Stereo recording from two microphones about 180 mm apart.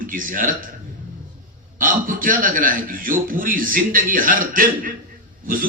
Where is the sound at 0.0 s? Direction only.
50° right (ahead or behind).